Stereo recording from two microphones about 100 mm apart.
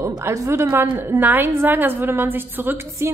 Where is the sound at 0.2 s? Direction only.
30° right (ahead or behind).